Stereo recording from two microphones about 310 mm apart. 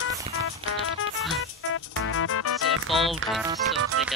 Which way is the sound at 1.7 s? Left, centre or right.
Left.